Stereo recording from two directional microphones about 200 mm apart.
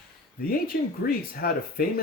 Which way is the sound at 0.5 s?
50° left (ahead or behind).